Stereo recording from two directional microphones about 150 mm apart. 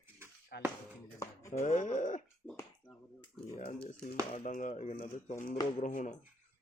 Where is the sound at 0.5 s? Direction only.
90° left.